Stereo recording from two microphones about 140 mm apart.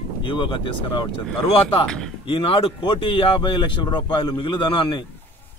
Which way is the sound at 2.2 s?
40° left (ahead or behind).